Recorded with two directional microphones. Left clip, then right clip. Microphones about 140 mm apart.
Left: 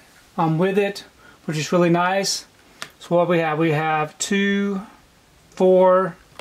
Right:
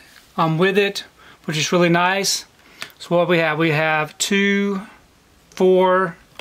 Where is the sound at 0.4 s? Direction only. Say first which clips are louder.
Right 3 dB; 25° right (ahead or behind).